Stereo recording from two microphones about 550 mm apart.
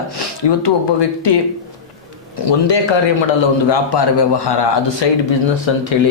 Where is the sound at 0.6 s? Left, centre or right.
Left.